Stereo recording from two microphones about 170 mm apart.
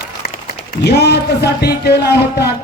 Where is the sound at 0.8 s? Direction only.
75° left (ahead or behind).